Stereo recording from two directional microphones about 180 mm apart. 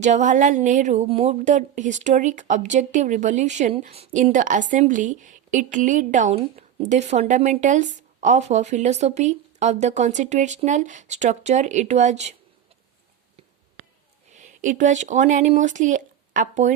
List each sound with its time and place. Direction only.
0.0 s a woman's voice: 40° right (ahead or behind)
14.3 s speech: 45° right (ahead or behind)